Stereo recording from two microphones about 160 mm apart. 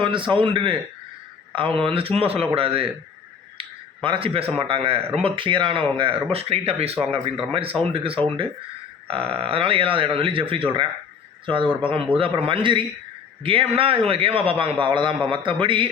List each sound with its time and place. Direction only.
0.0 s speech: 30° right (ahead or behind)